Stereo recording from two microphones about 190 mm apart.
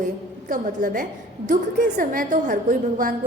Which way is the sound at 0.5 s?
45° right (ahead or behind).